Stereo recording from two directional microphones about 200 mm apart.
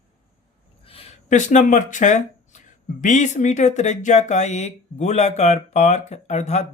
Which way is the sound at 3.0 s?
35° left (ahead or behind).